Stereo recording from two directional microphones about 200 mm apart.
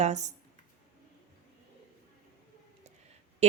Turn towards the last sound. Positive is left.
turn(degrees=-35)  # may be behind; listen again after turning